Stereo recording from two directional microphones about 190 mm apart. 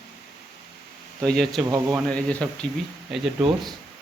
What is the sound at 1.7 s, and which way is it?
Speech, 15° right (ahead or behind).